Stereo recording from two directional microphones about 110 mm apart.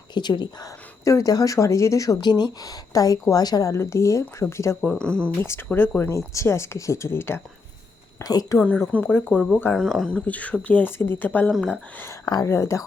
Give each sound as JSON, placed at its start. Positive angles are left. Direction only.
{"t": 0.1, "sound": "speech", "side_deg": 45}
{"t": 1.0, "sound": "speech", "side_deg": 30}
{"t": 4.8, "sound": "speech", "side_deg": 10}
{"t": 5.4, "sound": "speech", "side_deg": 20}
{"t": 8.2, "sound": "a woman's voice", "side_deg": 35}
{"t": 8.5, "sound": "speech", "side_deg": 15}
{"t": 9.7, "sound": "speech", "side_deg": 5}
{"t": 12.2, "sound": "speech", "side_deg": 35}